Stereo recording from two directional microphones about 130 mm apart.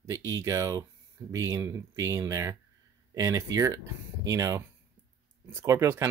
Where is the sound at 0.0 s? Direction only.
25° right (ahead or behind).